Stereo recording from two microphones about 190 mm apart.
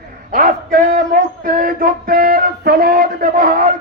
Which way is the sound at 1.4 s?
45° right (ahead or behind).